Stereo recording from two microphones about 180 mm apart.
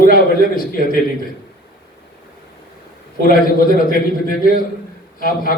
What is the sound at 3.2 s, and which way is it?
A man's voice, 55° left (ahead or behind).